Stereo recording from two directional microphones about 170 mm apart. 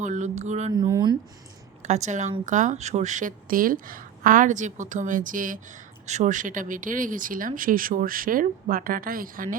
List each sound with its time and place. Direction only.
0.0 s speech: 45° right (ahead or behind)
0.8 s a sound: 25° right (ahead or behind)
1.8 s speech: 40° right (ahead or behind)